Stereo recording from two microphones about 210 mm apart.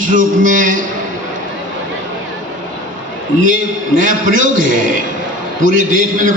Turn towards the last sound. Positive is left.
turn(degrees=-40)  # may be behind; listen again after turning